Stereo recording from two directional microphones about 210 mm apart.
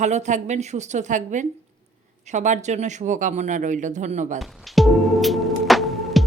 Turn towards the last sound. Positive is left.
turn(degrees=0)  # may be behind; listen again after turning